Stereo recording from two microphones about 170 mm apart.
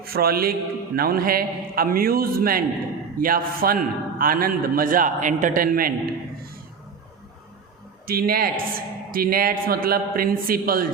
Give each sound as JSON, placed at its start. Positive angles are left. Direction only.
{"t": 0.0, "sound": "a man's voice", "side_deg": -65}
{"t": 8.0, "sound": "a man's voice", "side_deg": -60}